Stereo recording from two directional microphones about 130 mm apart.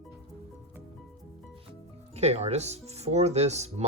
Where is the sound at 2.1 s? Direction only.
55° right (ahead or behind).